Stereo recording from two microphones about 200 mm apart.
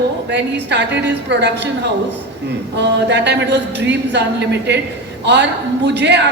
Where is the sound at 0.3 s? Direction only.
60° right (ahead or behind).